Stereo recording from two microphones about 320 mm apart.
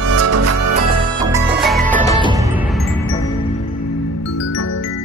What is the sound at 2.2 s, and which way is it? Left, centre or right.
Music, centre.